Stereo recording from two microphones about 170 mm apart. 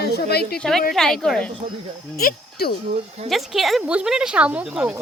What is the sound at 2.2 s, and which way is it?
Speech, 60° left (ahead or behind).